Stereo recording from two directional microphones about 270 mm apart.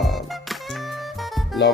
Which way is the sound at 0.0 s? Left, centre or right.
Centre.